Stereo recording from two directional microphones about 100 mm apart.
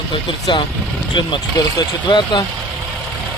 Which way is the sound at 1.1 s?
50° left (ahead or behind).